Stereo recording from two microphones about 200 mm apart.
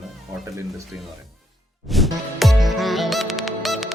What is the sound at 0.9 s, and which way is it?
Speech, 5° right (ahead or behind).